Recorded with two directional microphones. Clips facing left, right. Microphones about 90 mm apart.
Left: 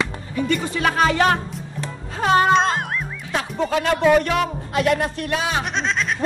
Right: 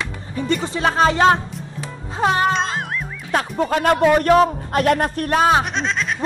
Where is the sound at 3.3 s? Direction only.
45° right (ahead or behind).